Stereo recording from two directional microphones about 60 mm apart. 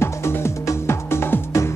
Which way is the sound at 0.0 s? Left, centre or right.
Left.